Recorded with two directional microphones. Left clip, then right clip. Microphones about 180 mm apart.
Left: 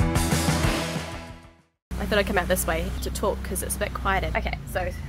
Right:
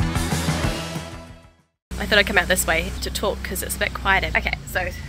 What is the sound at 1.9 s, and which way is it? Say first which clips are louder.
Speech: right 6 dB; centre (ahead or behind).